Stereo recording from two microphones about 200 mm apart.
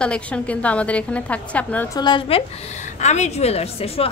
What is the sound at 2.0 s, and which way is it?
A woman's voice, 25° left (ahead or behind).